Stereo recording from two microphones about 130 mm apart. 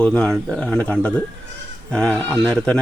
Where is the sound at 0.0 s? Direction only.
10° left (ahead or behind).